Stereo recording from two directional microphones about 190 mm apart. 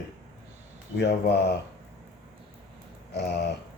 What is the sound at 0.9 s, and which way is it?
Speech, 60° left (ahead or behind).